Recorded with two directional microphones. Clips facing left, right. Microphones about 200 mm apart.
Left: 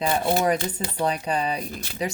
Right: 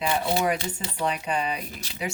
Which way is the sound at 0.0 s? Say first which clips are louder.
Left 3 dB; 40° left (ahead or behind).